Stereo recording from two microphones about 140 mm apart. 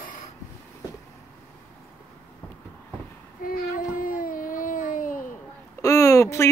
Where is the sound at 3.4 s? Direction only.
85° left.